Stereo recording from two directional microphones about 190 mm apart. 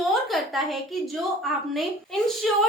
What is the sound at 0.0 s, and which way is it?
A woman's voice, centre (ahead or behind).